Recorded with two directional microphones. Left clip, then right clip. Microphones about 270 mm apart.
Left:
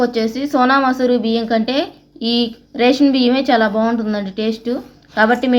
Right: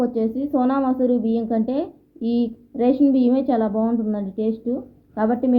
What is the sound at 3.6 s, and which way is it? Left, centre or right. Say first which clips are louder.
Speech: left 7 dB; left.